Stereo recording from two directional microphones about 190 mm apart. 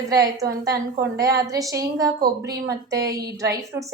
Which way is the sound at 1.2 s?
20° right (ahead or behind).